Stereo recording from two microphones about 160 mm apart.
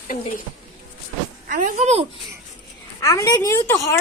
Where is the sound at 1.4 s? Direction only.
55° right (ahead or behind).